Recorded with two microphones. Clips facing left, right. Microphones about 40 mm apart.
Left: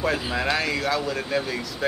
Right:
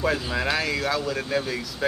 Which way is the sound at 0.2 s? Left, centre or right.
Centre.